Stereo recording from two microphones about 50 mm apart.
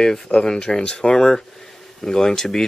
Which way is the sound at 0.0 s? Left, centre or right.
Centre.